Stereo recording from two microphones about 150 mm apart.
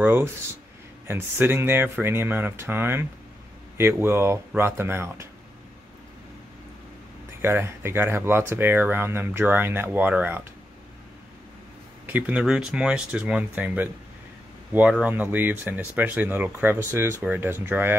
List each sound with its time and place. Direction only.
0.0 s speech: 15° right (ahead or behind)
7.4 s speech: 15° right (ahead or behind)
12.1 s speech: 10° right (ahead or behind)